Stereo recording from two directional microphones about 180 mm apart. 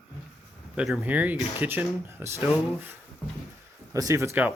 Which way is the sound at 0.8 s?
5° right (ahead or behind).